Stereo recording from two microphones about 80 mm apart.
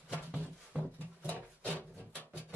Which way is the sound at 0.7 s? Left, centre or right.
Centre.